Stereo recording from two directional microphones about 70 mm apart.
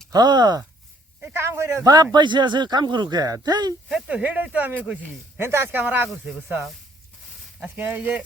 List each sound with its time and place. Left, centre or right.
0.1 s speech: right
1.3 s a man's voice: right
1.8 s a man's voice: right
2.1 s speech: right
3.8 s speech: centre
5.4 s a man's voice: right
6.3 s speech: right
7.6 s speech: right